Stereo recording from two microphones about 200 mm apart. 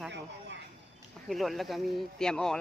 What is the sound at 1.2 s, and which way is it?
Speech, centre (ahead or behind).